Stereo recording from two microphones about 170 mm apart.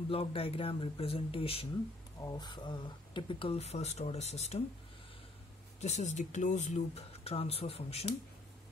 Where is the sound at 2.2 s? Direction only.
25° left (ahead or behind); by 4.6 s 40° left (ahead or behind).